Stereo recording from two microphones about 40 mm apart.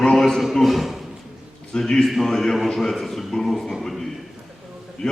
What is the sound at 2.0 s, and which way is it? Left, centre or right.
Speech, centre.